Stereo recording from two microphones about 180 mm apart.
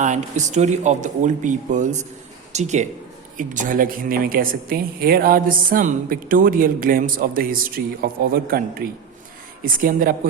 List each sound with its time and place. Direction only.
0.0 s a woman's voice: 40° right (ahead or behind)